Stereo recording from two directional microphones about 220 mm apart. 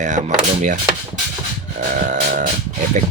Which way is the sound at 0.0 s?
35° right (ahead or behind).